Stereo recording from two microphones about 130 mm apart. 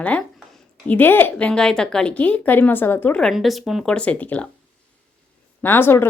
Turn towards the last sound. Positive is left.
turn(degrees=15)  # may be behind; listen again after turning